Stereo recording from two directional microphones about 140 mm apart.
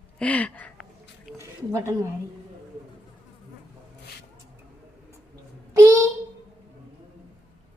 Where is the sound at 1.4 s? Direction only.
20° right (ahead or behind).